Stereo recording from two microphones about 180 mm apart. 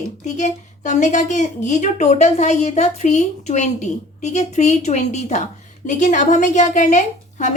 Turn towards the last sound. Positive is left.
turn(degrees=40)  # may be behind; listen again after turning